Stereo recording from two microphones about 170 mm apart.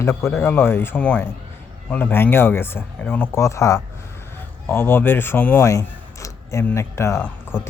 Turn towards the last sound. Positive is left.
turn(degrees=15)  # may be behind; listen again after turning